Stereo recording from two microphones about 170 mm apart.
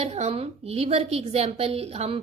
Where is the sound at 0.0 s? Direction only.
40° right (ahead or behind).